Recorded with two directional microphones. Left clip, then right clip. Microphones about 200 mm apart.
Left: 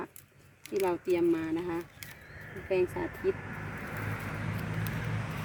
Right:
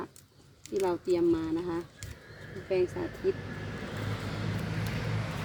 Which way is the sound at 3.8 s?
55° right (ahead or behind).